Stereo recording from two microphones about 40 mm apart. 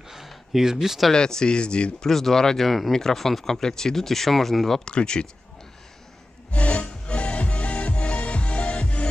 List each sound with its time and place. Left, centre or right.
0.1 s a sound: centre
1.1 s speech: centre
2.0 s speech: centre
4.8 s speech: left
6.5 s music: left